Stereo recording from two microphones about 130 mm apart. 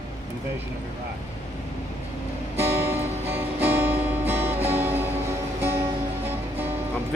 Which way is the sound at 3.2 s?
15° right (ahead or behind).